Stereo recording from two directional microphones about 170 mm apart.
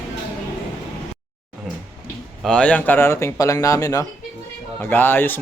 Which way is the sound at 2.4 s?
5° left (ahead or behind).